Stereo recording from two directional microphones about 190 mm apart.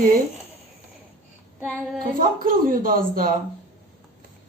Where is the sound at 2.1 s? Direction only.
50° right (ahead or behind).